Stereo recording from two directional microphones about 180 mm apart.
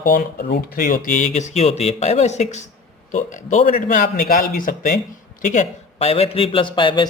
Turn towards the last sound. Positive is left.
turn(degrees=25)  # may be behind; listen again after turning